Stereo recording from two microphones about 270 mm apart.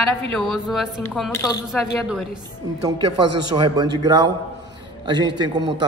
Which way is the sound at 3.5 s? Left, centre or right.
Centre.